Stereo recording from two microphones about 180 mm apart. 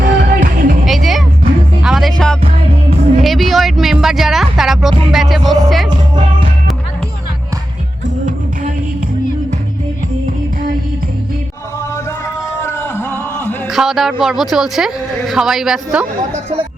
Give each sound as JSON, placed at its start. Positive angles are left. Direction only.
{"t": 0.0, "sound": "music", "side_deg": -55}
{"t": 0.9, "sound": "music", "side_deg": 0}
{"t": 12.6, "sound": "a sound", "side_deg": 15}
{"t": 13.7, "sound": "speech", "side_deg": 0}